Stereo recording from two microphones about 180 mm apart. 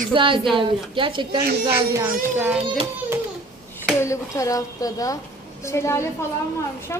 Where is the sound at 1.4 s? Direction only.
60° right (ahead or behind).